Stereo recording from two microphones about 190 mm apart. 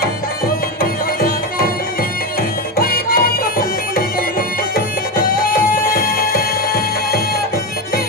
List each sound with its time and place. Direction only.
0.0 s music: 50° left (ahead or behind)
2.7 s music: 50° left (ahead or behind)